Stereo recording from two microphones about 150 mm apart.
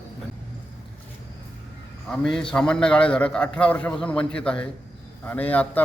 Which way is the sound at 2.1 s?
5° left (ahead or behind).